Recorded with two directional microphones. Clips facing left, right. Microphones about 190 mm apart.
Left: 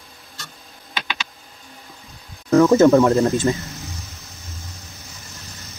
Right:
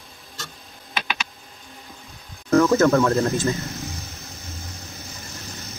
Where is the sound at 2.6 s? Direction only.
25° left (ahead or behind).